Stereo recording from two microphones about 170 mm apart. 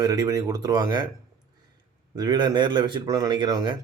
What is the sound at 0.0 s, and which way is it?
Speech, 20° right (ahead or behind).